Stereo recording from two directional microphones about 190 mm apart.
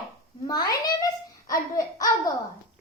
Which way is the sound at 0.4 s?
20° left (ahead or behind).